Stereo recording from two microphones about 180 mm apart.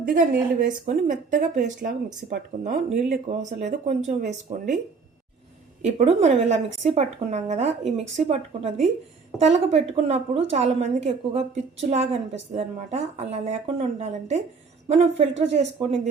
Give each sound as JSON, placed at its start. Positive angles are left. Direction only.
{"t": 0.6, "sound": "a woman's voice", "side_deg": -45}
{"t": 5.8, "sound": "a woman's voice", "side_deg": -40}